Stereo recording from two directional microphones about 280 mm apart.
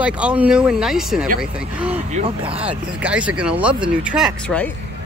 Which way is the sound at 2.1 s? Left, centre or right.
Centre.